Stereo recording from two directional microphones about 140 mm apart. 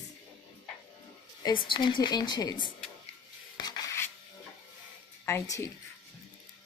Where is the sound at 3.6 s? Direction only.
30° left (ahead or behind).